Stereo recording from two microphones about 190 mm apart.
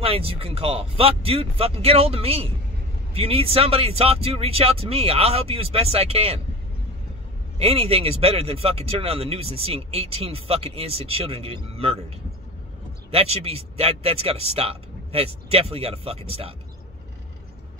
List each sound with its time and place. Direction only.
0.0 s speech: 30° right (ahead or behind)
7.5 s speech: 30° right (ahead or behind)
13.1 s speech: 30° right (ahead or behind)